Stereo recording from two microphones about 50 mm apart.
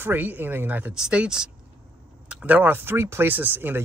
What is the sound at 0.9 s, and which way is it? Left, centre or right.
Speech, centre.